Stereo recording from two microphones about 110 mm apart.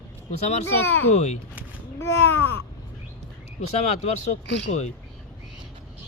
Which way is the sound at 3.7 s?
90° left.